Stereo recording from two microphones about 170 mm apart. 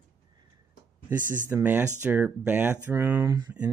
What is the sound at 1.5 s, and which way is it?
Speech, 10° right (ahead or behind).